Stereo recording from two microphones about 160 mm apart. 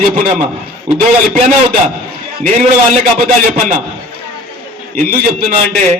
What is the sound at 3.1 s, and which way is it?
Speech, 55° right (ahead or behind).